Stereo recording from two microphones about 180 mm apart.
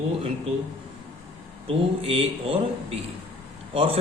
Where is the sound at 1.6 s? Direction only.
30° right (ahead or behind).